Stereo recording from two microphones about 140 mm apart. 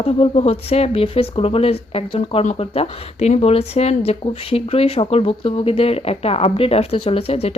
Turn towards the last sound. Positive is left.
turn(degrees=45)  # may be behind; listen again after turning